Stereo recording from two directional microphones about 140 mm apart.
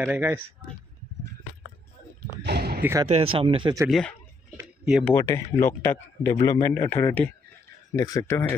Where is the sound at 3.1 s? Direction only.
45° right (ahead or behind).